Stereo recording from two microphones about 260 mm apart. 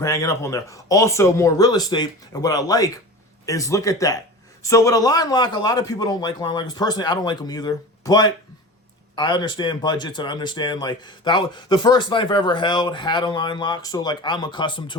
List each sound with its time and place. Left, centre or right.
0.0 s speech: centre